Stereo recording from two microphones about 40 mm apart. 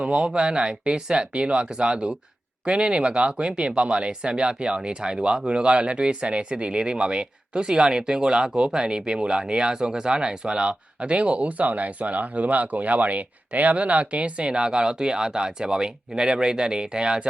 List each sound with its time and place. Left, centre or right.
0.0 s speech: right